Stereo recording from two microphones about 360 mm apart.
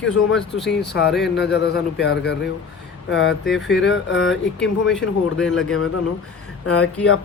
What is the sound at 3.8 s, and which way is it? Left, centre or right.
Speech, left.